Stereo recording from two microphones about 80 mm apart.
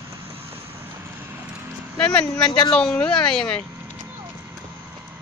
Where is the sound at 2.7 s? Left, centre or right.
Centre.